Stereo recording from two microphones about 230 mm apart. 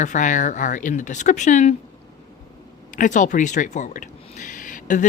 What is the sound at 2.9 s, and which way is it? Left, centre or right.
Speech, left.